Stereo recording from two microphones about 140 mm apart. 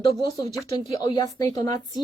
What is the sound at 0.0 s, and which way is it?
A woman's voice, 35° left (ahead or behind).